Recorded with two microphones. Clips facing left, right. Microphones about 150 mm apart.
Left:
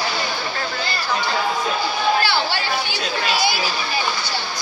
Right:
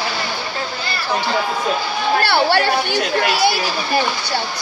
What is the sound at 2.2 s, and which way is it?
Speech, 60° right (ahead or behind).